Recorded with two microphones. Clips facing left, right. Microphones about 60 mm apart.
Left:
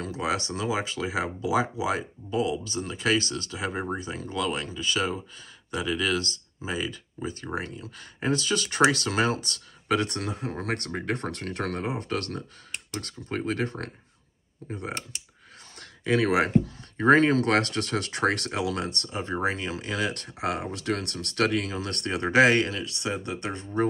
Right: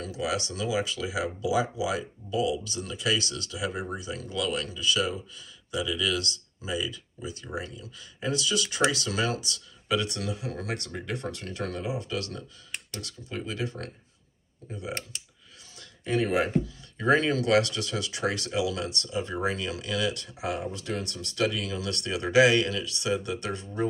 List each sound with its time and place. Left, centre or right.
0.0 s speech: left
15.8 s speech: left
16.9 s speech: left
21.7 s speech: left